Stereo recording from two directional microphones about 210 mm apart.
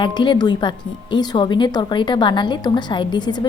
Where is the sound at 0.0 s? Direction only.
20° left (ahead or behind).